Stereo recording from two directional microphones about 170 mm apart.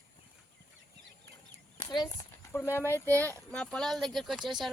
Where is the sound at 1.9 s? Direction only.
25° left (ahead or behind).